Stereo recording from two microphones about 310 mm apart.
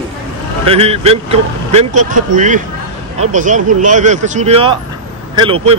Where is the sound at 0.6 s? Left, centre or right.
Centre.